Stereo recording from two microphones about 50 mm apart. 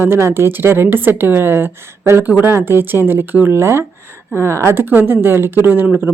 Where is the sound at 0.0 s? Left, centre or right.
Right.